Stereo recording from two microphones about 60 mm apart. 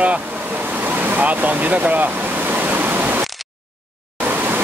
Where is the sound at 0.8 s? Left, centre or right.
Right.